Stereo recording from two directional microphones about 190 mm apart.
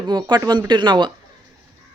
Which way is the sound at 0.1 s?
20° right (ahead or behind).